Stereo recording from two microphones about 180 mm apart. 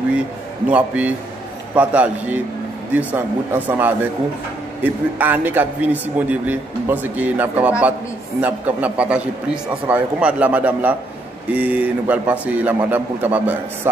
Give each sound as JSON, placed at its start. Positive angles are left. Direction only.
{"t": 0.7, "sound": "a man's voice", "side_deg": -10}